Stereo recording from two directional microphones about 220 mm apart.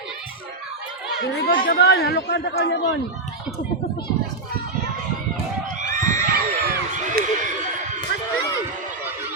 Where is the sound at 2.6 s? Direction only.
50° left (ahead or behind).